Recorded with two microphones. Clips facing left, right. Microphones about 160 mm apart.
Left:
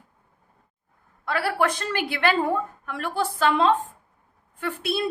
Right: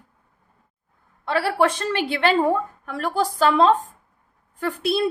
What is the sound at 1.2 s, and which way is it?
A woman's voice, 25° right (ahead or behind).